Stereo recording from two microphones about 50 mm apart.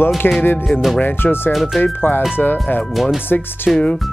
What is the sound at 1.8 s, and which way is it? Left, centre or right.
Speech, left.